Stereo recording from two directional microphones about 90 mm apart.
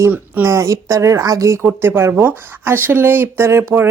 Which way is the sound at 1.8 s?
25° right (ahead or behind).